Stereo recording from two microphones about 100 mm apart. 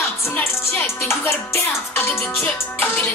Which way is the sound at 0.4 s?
25° left (ahead or behind).